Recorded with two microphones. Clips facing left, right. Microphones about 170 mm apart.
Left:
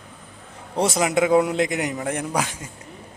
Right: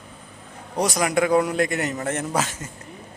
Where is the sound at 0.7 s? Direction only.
25° left (ahead or behind).